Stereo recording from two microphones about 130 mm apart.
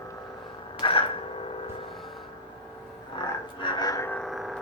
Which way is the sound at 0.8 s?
45° left (ahead or behind).